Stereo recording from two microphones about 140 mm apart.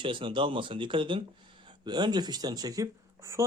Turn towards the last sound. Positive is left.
turn(degrees=-20)  # may be behind; listen again after turning